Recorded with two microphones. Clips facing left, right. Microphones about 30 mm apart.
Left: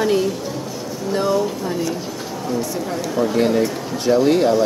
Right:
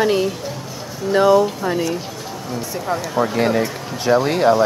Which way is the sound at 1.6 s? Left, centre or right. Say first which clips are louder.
Right 3 dB; right.